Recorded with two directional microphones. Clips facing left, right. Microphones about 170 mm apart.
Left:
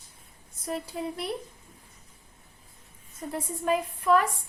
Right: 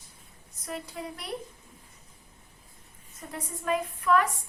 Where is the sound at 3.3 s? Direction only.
30° left (ahead or behind).